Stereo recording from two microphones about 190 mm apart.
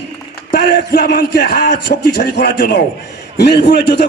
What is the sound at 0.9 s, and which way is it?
Speech, 45° left (ahead or behind).